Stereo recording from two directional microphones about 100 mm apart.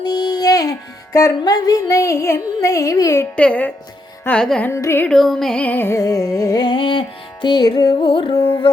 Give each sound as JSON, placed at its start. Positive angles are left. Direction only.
{"t": 0.1, "sound": "music", "side_deg": 45}
{"t": 3.3, "sound": "music", "side_deg": 15}
{"t": 4.7, "sound": "carnatic music", "side_deg": 25}
{"t": 5.0, "sound": "music", "side_deg": 0}
{"t": 5.9, "sound": "music", "side_deg": 35}
{"t": 8.0, "sound": "carnatic music", "side_deg": 60}
{"t": 8.4, "sound": "music", "side_deg": 35}